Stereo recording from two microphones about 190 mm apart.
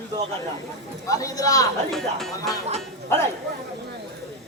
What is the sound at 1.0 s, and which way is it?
Speech, 20° left (ahead or behind).